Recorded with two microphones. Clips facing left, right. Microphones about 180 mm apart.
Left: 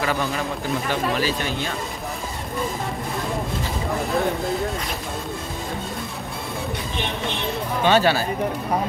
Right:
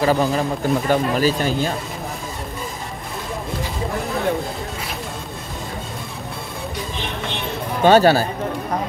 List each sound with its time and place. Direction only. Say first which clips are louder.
0.0 s speech: right 6 dB; 35° right (ahead or behind)
7.8 s speech: right 6 dB; 45° right (ahead or behind)